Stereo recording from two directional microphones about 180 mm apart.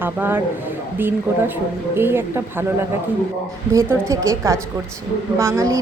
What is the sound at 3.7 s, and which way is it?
A woman's voice, 15° right (ahead or behind).